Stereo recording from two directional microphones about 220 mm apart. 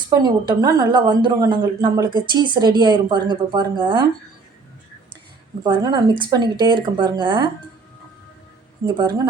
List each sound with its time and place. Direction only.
0.1 s a woman's voice: 20° right (ahead or behind)
5.6 s a woman's voice: 20° right (ahead or behind)
9.0 s a woman's voice: 20° right (ahead or behind)